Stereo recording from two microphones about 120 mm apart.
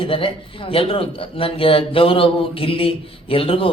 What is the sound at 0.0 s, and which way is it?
A man's voice, 50° left (ahead or behind).